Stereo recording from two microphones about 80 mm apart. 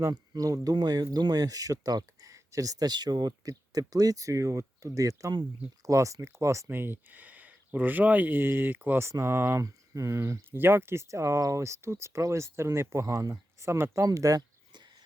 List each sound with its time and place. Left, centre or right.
0.1 s speech: right
6.7 s speech: right
9.6 s speech: right